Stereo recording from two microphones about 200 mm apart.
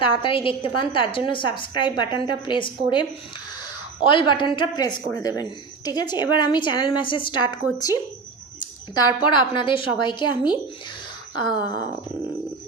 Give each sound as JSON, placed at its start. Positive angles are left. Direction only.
{"t": 0.0, "sound": "a woman's voice", "side_deg": 25}
{"t": 4.1, "sound": "a woman's voice", "side_deg": 25}
{"t": 9.0, "sound": "a woman's voice", "side_deg": 20}